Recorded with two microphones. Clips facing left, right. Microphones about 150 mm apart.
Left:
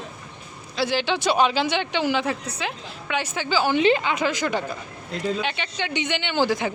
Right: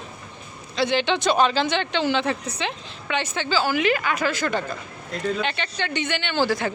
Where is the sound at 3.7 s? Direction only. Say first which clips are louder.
Left 3 dB; 25° left (ahead or behind).